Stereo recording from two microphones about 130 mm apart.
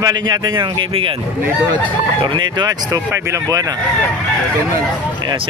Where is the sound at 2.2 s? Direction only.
35° right (ahead or behind).